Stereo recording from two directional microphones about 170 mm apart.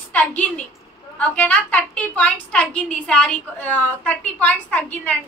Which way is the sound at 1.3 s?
10° left (ahead or behind).